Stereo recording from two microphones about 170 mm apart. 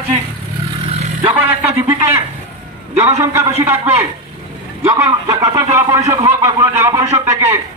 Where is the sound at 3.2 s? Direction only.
15° right (ahead or behind).